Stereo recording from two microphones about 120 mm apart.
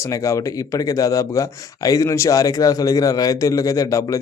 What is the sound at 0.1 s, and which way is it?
Speech, 25° left (ahead or behind).